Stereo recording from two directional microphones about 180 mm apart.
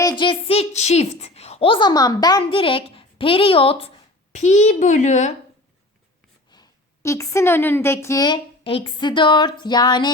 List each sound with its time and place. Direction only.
0.0 s a woman's voice: 25° left (ahead or behind); by 5.3 s 40° left (ahead or behind)
6.5 s speech: 20° left (ahead or behind)